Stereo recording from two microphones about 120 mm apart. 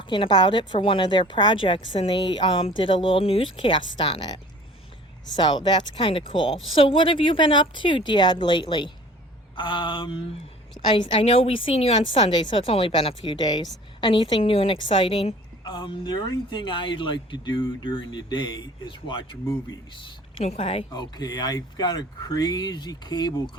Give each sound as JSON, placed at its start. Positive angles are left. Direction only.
{"t": 0.0, "sound": "speech", "side_deg": 45}
{"t": 5.4, "sound": "speech", "side_deg": 40}
{"t": 15.6, "sound": "speech", "side_deg": 40}
{"t": 20.4, "sound": "speech", "side_deg": 55}
{"t": 20.9, "sound": "speech", "side_deg": 35}